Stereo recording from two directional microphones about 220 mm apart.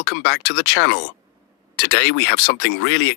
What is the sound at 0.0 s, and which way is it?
Speech, 50° left (ahead or behind).